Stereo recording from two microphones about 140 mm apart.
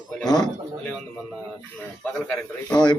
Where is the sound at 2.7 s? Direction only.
30° left (ahead or behind).